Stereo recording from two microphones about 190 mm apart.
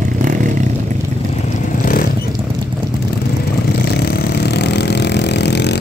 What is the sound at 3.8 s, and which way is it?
Vehicle, 60° left (ahead or behind).